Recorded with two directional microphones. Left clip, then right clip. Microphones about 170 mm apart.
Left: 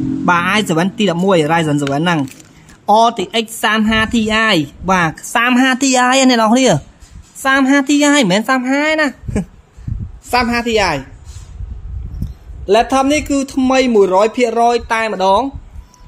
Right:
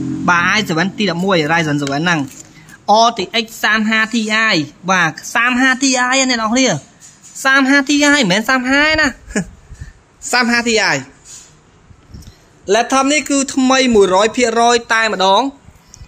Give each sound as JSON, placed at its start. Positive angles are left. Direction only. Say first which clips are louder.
{"t": 0.3, "sound": "speech", "louder": "right 1 dB", "side_deg": 20}
{"t": 7.4, "sound": "a man's voice", "louder": "right 1 dB", "side_deg": 15}
{"t": 12.6, "sound": "a man's voice", "louder": "left 1 dB", "side_deg": 15}